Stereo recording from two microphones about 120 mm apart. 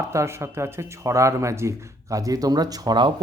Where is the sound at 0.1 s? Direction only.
25° right (ahead or behind).